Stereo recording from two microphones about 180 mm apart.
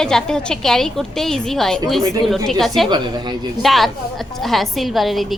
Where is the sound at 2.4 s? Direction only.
Centre (ahead or behind).